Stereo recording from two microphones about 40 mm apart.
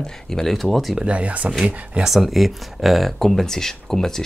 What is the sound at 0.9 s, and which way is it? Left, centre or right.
Speech, right.